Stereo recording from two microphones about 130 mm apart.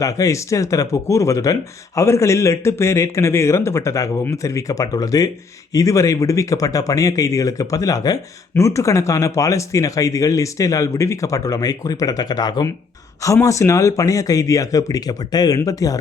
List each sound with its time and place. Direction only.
0.0 s speech: 25° left (ahead or behind)